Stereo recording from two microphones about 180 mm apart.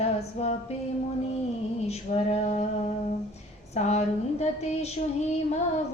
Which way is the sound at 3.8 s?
40° left (ahead or behind).